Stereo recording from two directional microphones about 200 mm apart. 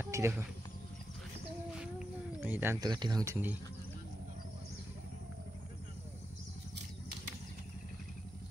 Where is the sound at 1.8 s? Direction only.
5° right (ahead or behind).